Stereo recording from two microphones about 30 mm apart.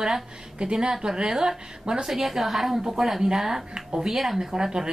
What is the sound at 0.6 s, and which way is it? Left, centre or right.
A woman's voice, right.